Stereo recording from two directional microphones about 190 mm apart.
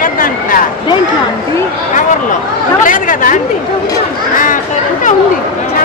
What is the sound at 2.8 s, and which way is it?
Chatter, 45° left (ahead or behind).